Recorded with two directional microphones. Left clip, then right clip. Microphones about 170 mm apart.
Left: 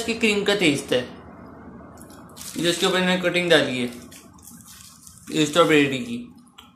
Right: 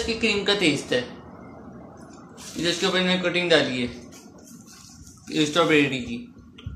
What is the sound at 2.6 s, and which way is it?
A man's voice, 40° left (ahead or behind).